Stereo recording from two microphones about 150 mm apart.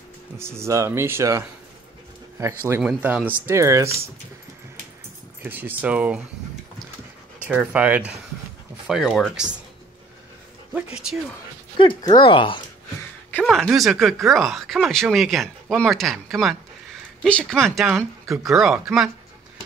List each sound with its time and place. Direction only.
0.4 s speech: 20° right (ahead or behind)
3.0 s speech: 10° right (ahead or behind)
5.4 s speech: 15° right (ahead or behind)
7.4 s speech: 10° right (ahead or behind)
10.7 s speech: 5° right (ahead or behind)
11.8 s speech: 30° left (ahead or behind)
13.3 s speech: 5° left (ahead or behind)